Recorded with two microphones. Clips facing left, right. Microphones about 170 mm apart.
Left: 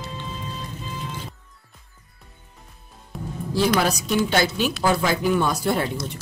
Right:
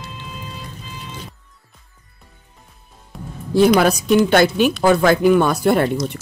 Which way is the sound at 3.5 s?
55° right (ahead or behind).